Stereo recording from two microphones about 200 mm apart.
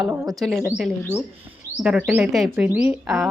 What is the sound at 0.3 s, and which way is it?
Speech, centre (ahead or behind).